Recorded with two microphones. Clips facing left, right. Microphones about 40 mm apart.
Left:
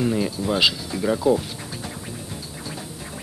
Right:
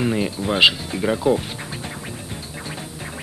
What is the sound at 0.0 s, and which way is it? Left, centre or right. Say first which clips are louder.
Speech: right 1 dB; right.